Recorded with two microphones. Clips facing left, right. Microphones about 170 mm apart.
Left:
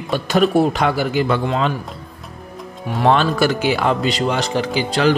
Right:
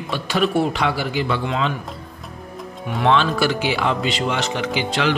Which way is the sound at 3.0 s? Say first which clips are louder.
Left 3 dB; 45° left (ahead or behind).